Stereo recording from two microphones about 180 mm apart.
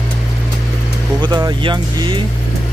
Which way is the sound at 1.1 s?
25° right (ahead or behind).